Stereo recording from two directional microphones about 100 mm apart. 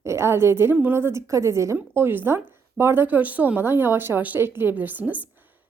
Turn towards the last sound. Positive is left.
turn(degrees=-15)  # may be behind; listen again after turning